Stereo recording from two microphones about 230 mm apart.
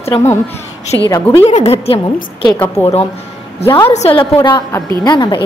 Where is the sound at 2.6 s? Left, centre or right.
Centre.